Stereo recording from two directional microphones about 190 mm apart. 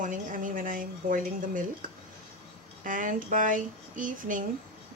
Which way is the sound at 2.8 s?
45° right (ahead or behind).